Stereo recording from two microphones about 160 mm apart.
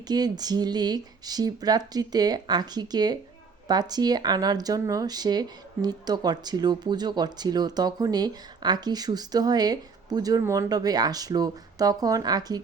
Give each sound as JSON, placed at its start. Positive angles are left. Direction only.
{"t": 0.1, "sound": "speech", "side_deg": -25}